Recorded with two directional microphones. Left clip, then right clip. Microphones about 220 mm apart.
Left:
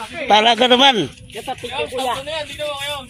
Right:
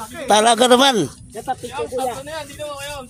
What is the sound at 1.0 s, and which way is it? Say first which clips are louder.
Speech: even; 5° left (ahead or behind).